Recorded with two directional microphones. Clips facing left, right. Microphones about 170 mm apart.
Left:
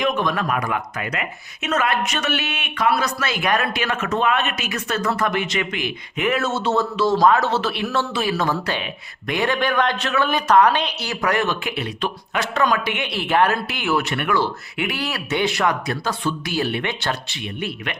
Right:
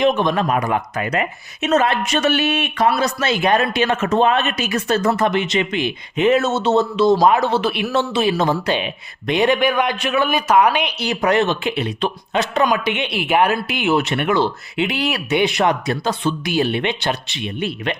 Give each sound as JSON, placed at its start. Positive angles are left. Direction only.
{"t": 0.0, "sound": "speech", "side_deg": -25}